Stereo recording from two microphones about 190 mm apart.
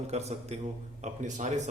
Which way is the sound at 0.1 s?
35° right (ahead or behind).